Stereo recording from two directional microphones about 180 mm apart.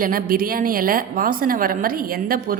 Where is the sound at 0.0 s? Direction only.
50° right (ahead or behind).